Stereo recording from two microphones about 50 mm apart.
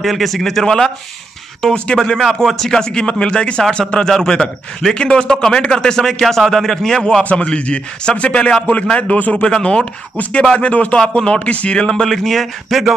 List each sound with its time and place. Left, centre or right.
0.0 s a man's voice: centre
2.2 s a man's voice: centre
7.2 s a man's voice: left; by 12.8 s centre